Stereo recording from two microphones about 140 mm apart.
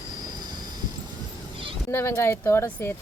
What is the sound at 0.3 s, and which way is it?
Vehicle, 30° right (ahead or behind).